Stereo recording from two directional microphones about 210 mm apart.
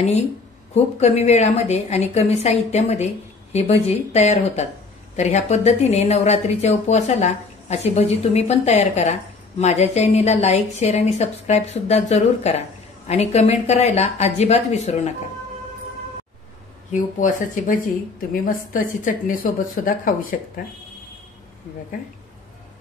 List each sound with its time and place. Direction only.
0.7 s a woman's voice: 30° left (ahead or behind)
16.9 s a woman's voice: 40° left (ahead or behind)